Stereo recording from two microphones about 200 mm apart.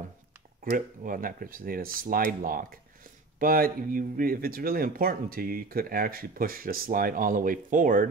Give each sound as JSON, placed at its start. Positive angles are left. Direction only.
{"t": 0.7, "sound": "speech", "side_deg": -45}